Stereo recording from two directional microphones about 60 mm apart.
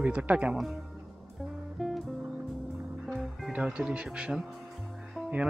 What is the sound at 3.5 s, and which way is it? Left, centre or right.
Speech, centre.